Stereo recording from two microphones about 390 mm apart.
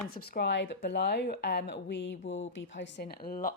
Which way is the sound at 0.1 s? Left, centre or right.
Left.